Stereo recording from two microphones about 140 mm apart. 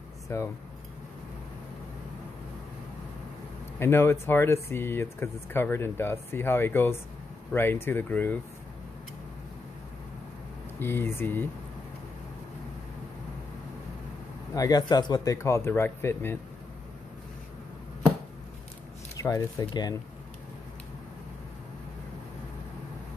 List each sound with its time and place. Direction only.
0.3 s speech: 20° left (ahead or behind)
3.8 s speech: 15° left (ahead or behind)
10.8 s speech: 15° left (ahead or behind)
14.5 s speech: 25° left (ahead or behind)
19.1 s speech: 25° left (ahead or behind)